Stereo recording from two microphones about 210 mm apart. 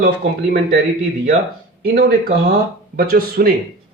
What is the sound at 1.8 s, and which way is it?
Speech, 45° right (ahead or behind).